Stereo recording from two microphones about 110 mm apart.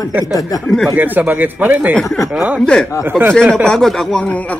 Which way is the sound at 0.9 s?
15° right (ahead or behind).